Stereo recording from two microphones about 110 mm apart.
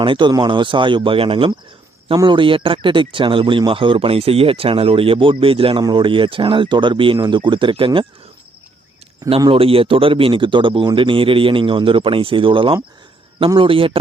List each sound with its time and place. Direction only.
0.0 s speech: 45° right (ahead or behind)
9.5 s speech: 60° right (ahead or behind)